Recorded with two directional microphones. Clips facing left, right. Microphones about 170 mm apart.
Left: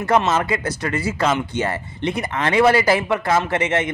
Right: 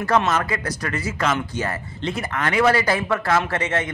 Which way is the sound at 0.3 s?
25° left (ahead or behind).